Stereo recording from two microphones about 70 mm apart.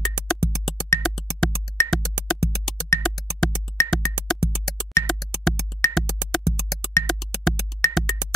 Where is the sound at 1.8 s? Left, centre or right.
Left.